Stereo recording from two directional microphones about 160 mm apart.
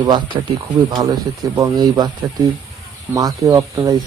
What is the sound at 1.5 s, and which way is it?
Speech, 25° right (ahead or behind).